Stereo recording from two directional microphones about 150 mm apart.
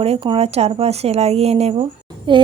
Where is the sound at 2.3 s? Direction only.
35° right (ahead or behind).